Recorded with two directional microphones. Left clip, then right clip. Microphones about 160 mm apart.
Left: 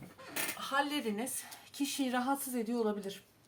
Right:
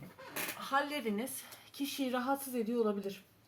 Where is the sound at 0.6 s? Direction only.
25° left (ahead or behind).